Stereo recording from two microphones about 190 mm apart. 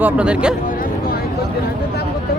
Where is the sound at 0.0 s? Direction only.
5° right (ahead or behind).